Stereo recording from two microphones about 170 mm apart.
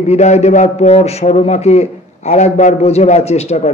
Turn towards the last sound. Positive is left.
turn(degrees=40)  # may be behind; listen again after turning